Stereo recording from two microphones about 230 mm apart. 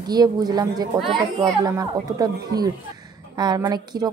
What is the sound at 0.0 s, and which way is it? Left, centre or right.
A woman's voice, centre.